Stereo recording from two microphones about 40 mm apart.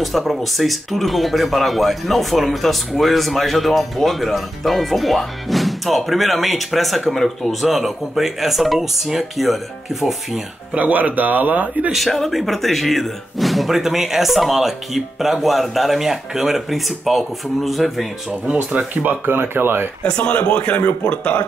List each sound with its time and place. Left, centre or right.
0.0 s speech: centre
10.7 s speech: right
11.9 s speech: centre
18.5 s speech: right
19.0 s speech: right
20.0 s speech: left